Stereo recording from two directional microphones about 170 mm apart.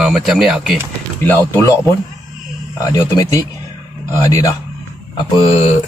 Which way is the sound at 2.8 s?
20° left (ahead or behind).